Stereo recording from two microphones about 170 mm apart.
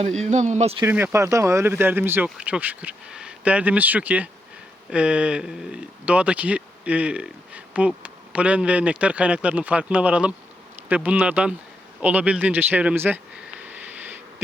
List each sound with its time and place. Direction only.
0.2 s speech: 45° right (ahead or behind)
0.9 s speech: 15° right (ahead or behind)
11.9 s a sound: 10° right (ahead or behind)